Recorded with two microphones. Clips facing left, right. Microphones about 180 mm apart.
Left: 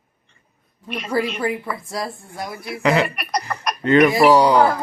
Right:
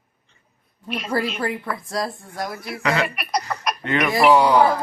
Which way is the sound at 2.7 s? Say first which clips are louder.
Left 5 dB; 25° left (ahead or behind).